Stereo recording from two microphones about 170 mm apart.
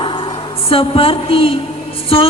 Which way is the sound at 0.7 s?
35° left (ahead or behind).